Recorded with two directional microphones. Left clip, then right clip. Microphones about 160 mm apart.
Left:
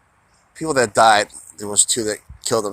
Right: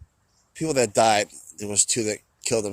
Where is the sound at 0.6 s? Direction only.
55° right (ahead or behind).